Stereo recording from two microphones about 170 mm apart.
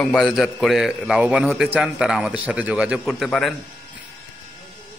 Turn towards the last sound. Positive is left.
turn(degrees=0)  # may be behind; listen again after turning